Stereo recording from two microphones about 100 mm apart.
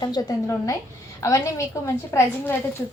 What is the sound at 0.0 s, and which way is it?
A woman's voice, 40° left (ahead or behind).